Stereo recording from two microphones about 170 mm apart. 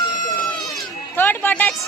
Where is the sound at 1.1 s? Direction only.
10° left (ahead or behind).